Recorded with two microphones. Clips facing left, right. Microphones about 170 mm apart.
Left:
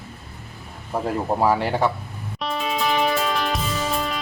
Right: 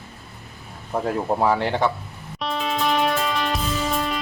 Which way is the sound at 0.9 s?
5° left (ahead or behind).